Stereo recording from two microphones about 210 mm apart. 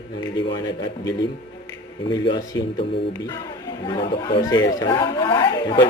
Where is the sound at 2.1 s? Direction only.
20° left (ahead or behind).